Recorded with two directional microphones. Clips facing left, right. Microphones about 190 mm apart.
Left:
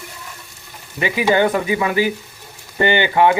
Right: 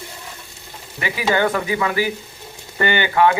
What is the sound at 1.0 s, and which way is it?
Frying, 20° left (ahead or behind).